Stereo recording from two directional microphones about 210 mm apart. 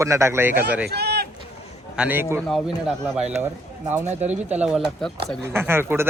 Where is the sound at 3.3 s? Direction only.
10° right (ahead or behind).